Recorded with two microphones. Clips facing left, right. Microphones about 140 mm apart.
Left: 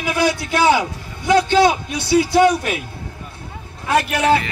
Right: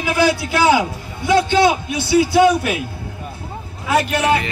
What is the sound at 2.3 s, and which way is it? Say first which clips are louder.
Speech: right 1 dB; 5° right (ahead or behind).